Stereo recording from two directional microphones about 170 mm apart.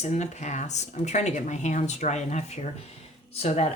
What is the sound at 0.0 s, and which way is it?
Speech, 40° left (ahead or behind).